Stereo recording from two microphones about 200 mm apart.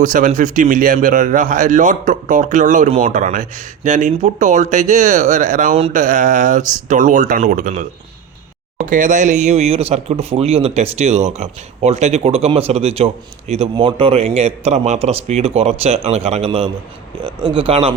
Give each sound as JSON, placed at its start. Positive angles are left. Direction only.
{"t": 0.0, "sound": "speech", "side_deg": -40}